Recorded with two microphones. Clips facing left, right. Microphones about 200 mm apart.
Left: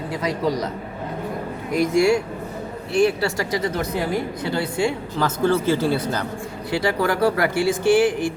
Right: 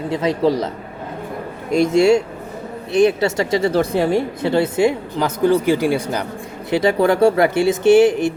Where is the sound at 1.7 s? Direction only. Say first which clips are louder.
Right 4 dB; 25° right (ahead or behind).